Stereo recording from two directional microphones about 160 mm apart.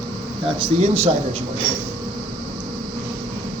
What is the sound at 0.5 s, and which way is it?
Speech, 40° right (ahead or behind).